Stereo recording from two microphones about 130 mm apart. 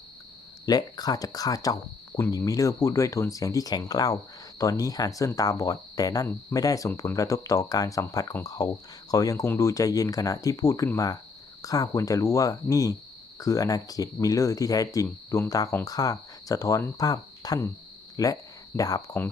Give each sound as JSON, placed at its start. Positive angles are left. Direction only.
{"t": 0.6, "sound": "speech", "side_deg": 30}